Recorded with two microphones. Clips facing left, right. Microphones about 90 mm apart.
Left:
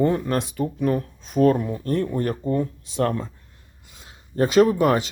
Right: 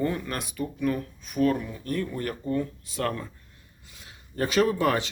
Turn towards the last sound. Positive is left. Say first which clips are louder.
# left 5 dB
turn(degrees=20)  # may be behind; listen again after turning